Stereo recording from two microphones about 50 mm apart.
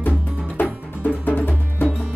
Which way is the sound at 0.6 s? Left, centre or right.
Left.